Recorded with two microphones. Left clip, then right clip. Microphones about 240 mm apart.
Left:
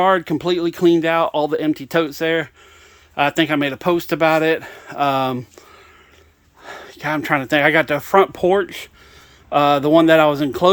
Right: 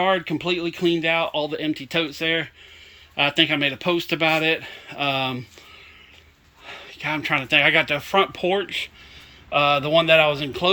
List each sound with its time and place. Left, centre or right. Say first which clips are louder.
0.0 s speech: left 5 dB; left
6.7 s speech: left 4 dB; left